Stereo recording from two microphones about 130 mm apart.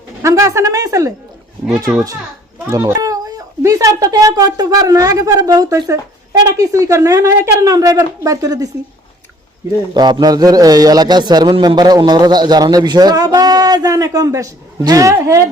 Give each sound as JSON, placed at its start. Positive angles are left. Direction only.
{"t": 0.2, "sound": "a child's voice", "side_deg": -25}
{"t": 2.6, "sound": "a child's voice", "side_deg": -20}
{"t": 9.9, "sound": "a man's voice", "side_deg": -35}